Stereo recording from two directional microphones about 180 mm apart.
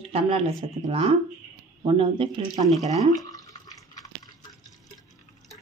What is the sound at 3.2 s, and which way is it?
Drip, 20° left (ahead or behind).